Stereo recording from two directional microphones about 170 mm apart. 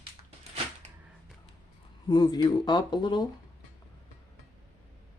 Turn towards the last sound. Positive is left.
turn(degrees=25)  # may be behind; listen again after turning